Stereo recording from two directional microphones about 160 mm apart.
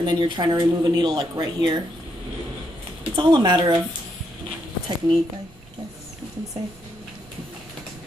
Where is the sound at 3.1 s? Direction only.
30° right (ahead or behind).